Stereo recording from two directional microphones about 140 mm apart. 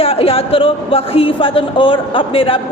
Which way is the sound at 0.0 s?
45° left (ahead or behind).